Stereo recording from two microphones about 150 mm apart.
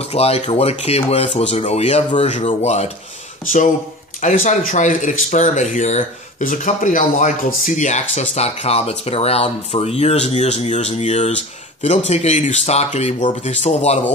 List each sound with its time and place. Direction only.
0.0 s speech: 40° left (ahead or behind)
3.4 s speech: 60° left (ahead or behind); by 14.0 s 45° left (ahead or behind)